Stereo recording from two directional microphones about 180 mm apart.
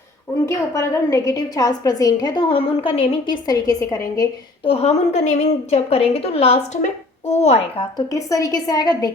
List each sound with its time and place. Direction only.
0.4 s a woman's voice: 15° left (ahead or behind)
4.6 s a woman's voice: 35° left (ahead or behind)
7.9 s a woman's voice: 20° left (ahead or behind)